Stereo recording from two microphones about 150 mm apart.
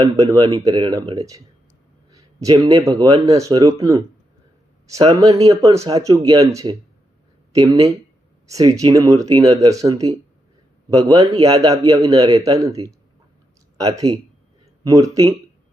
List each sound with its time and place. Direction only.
0.0 s a man's voice: 25° right (ahead or behind)
4.9 s a man's voice: 25° right (ahead or behind)